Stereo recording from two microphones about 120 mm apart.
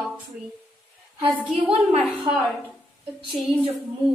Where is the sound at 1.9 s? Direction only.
55° right (ahead or behind).